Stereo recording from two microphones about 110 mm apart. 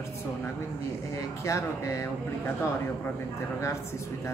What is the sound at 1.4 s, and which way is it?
Speech, 30° left (ahead or behind).